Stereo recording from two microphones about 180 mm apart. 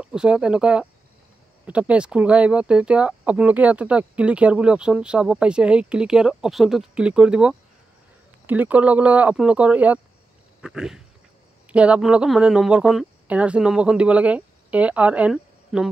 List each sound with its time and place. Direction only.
0.0 s speech: 5° right (ahead or behind)